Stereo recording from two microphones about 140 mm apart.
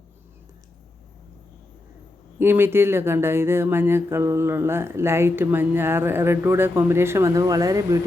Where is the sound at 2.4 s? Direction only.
15° right (ahead or behind).